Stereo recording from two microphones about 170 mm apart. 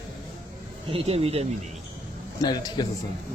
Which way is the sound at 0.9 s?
35° right (ahead or behind).